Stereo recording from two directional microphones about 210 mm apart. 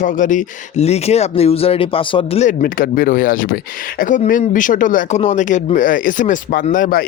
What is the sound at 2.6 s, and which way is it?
Speech, 40° left (ahead or behind).